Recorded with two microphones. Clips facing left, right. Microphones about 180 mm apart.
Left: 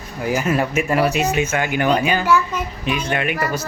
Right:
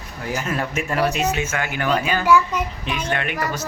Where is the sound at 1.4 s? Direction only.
20° left (ahead or behind).